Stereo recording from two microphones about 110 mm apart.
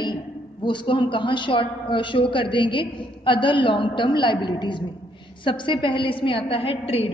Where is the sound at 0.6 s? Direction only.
50° left (ahead or behind).